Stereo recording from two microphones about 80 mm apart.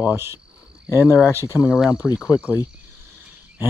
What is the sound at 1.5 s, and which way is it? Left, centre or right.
Speech, centre.